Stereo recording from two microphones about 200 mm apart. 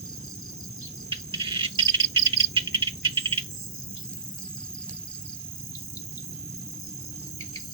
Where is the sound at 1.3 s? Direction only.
20° right (ahead or behind).